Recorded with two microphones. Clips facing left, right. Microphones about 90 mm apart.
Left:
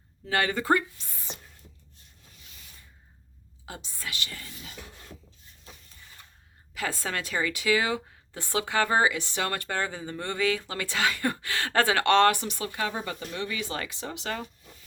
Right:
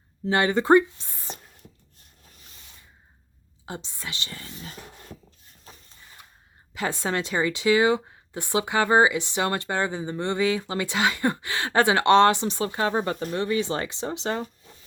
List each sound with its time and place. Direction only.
0.3 s speech: 25° right (ahead or behind)
3.7 s speech: 25° right (ahead or behind); by 5.1 s 40° right (ahead or behind)
6.7 s speech: 25° right (ahead or behind)
12.9 s speech: 40° right (ahead or behind)